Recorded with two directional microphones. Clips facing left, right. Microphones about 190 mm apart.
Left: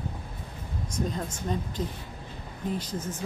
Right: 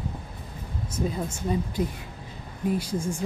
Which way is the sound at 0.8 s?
5° right (ahead or behind).